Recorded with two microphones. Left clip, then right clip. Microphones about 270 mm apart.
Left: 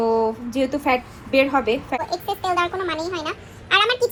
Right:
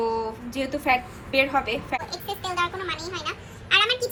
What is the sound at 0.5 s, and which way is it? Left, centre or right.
A woman's voice, centre.